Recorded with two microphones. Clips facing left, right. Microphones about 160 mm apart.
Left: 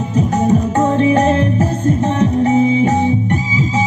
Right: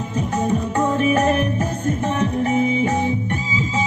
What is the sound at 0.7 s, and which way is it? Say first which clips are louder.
Music: left 3 dB; 20° left (ahead or behind).